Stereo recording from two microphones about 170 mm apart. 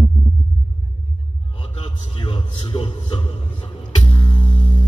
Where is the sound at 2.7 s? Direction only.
35° left (ahead or behind).